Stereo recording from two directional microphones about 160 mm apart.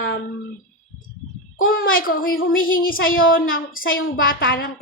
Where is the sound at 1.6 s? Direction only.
65° left (ahead or behind).